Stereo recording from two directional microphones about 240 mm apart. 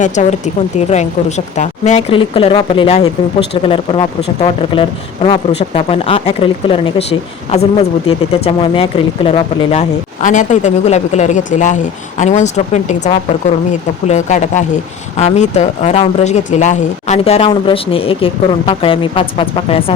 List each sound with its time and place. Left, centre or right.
0.0 s speech: left